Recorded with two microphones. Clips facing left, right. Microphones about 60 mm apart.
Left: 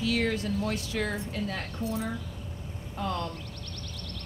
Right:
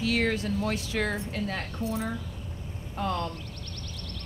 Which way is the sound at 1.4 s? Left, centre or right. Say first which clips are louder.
Right 1 dB; right.